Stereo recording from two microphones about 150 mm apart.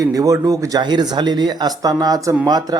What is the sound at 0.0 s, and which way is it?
A man's voice, 20° right (ahead or behind).